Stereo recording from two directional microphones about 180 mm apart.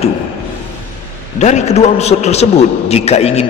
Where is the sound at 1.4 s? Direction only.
40° left (ahead or behind).